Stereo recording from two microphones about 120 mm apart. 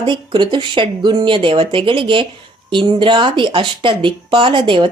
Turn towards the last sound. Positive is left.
turn(degrees=-45)  # may be behind; listen again after turning